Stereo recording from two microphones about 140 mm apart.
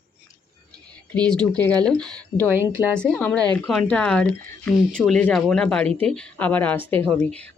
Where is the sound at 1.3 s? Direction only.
10° left (ahead or behind).